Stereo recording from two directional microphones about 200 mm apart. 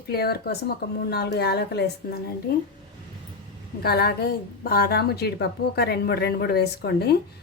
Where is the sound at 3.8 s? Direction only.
50° left (ahead or behind).